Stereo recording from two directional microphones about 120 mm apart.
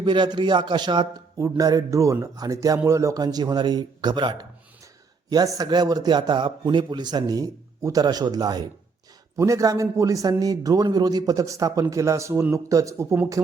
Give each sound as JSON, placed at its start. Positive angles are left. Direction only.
{"t": 0.0, "sound": "speech", "side_deg": -40}
{"t": 1.4, "sound": "speech", "side_deg": -25}